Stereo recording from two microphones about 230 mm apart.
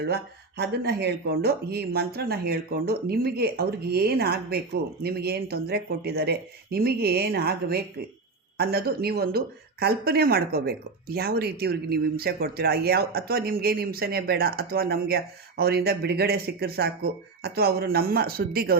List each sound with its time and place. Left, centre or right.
0.0 s speech: right